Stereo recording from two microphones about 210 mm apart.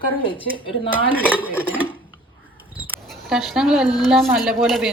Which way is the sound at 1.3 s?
5° right (ahead or behind).